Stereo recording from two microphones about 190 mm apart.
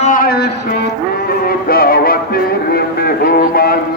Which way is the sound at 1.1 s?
55° left (ahead or behind).